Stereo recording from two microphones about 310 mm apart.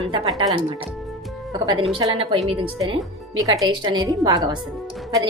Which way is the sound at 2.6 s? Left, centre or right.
Centre.